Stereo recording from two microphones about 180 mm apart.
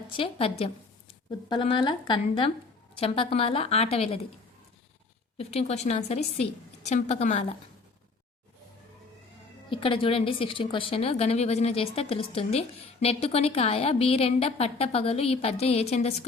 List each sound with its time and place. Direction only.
0.2 s a woman's voice: 30° left (ahead or behind)
5.4 s a woman's voice: 35° left (ahead or behind)
9.6 s a woman's voice: 30° left (ahead or behind)